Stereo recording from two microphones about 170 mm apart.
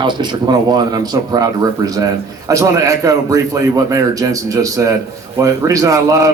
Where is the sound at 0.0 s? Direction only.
25° right (ahead or behind).